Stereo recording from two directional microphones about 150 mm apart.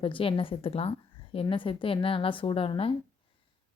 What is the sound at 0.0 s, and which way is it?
Speech, 35° left (ahead or behind).